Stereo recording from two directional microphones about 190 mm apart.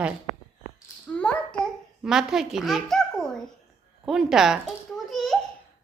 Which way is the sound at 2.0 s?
5° right (ahead or behind).